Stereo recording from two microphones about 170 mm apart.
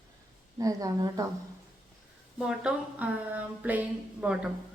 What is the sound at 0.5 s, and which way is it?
Speech, 20° right (ahead or behind).